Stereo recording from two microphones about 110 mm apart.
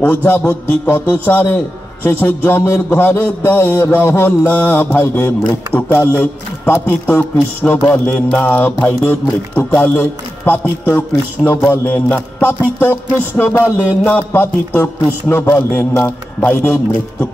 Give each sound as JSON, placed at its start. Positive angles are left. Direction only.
{"t": 0.0, "sound": "a man's voice", "side_deg": 15}
{"t": 2.0, "sound": "music", "side_deg": 20}
{"t": 5.5, "sound": "a man's voice", "side_deg": 15}
{"t": 6.6, "sound": "music", "side_deg": 20}
{"t": 8.4, "sound": "a man's voice", "side_deg": 15}
{"t": 8.8, "sound": "music", "side_deg": 20}